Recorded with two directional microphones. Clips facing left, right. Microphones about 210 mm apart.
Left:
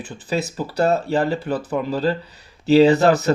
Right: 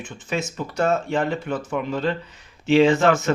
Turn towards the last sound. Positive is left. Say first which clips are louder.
# left 3 dB
turn(degrees=35)  # may be behind; listen again after turning